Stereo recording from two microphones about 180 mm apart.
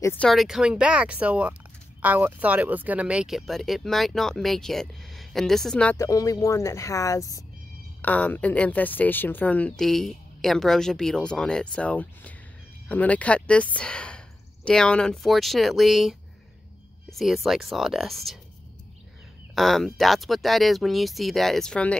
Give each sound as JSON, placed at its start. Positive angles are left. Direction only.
{"t": 0.2, "sound": "speech", "side_deg": 0}
{"t": 5.9, "sound": "speech", "side_deg": 15}
{"t": 19.5, "sound": "speech", "side_deg": 0}